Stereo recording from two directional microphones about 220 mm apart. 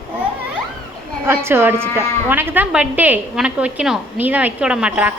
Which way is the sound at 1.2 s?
10° right (ahead or behind).